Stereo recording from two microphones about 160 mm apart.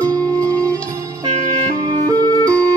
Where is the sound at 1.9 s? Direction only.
25° right (ahead or behind).